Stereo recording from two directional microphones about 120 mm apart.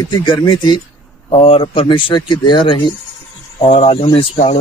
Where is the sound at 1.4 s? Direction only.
50° left (ahead or behind).